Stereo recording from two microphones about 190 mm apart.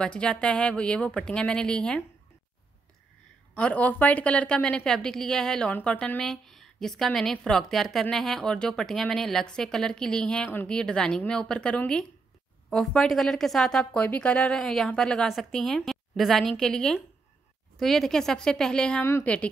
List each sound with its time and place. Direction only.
0.0 s a woman's voice: 5° left (ahead or behind)
3.5 s a woman's voice: 5° left (ahead or behind)